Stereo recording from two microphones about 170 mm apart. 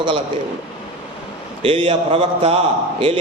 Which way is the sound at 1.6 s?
30° right (ahead or behind).